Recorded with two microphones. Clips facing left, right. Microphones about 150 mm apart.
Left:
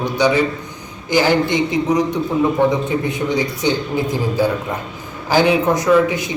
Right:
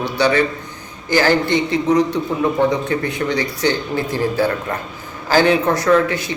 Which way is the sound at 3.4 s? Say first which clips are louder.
Left 1 dB; 15° left (ahead or behind).